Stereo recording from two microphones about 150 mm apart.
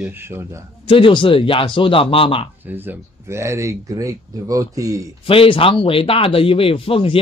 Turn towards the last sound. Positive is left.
turn(degrees=40)  # may be behind; listen again after turning